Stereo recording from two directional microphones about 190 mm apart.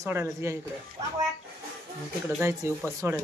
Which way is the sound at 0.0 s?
15° right (ahead or behind).